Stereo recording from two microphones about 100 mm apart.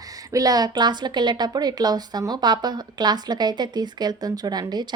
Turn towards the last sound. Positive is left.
turn(degrees=-40)  # may be behind; listen again after turning